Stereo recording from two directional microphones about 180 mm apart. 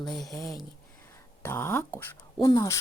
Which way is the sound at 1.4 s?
15° left (ahead or behind).